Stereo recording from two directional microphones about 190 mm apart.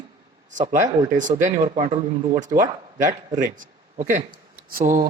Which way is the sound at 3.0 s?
45° right (ahead or behind).